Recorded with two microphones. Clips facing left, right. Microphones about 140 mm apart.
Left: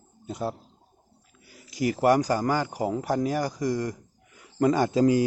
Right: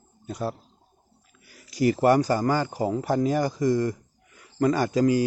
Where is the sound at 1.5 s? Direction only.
20° left (ahead or behind).